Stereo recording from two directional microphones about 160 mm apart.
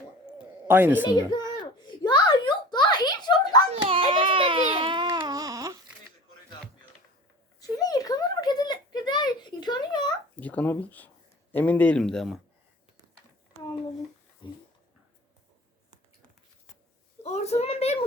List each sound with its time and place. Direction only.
0.7 s a woman's voice: 10° right (ahead or behind)
1.0 s speech: 25° left (ahead or behind)
2.0 s a sound: 30° left (ahead or behind)
3.7 s hands: 35° right (ahead or behind)
4.1 s baby cry: 30° right (ahead or behind)
7.8 s a sound: 25° left (ahead or behind)
10.4 s speech: 10° left (ahead or behind)
14.4 s speech: 30° left (ahead or behind)
17.2 s a child's voice: 45° left (ahead or behind)